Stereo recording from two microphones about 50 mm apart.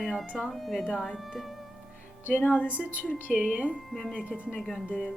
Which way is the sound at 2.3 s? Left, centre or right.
Left.